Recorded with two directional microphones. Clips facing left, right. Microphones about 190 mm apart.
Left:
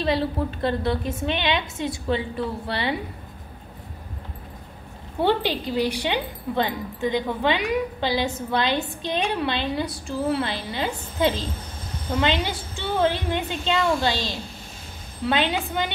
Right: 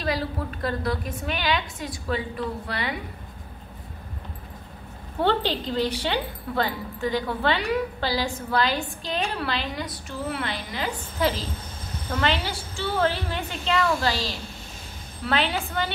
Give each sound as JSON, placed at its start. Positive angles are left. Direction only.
{"t": 0.0, "sound": "speech", "side_deg": 25}
{"t": 5.2, "sound": "a woman's voice", "side_deg": 10}